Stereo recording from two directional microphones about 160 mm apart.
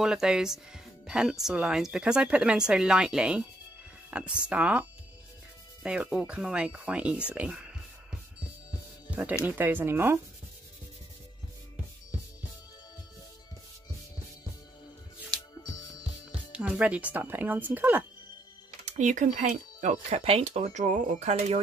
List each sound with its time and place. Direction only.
0.0 s speech: 5° right (ahead or behind)
7.3 s a sound: 5° right (ahead or behind)
9.1 s speech: 10° right (ahead or behind)
16.0 s speech: 5° right (ahead or behind)
18.9 s speech: 50° right (ahead or behind)